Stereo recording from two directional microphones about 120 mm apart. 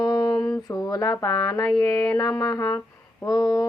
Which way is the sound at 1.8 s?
30° left (ahead or behind).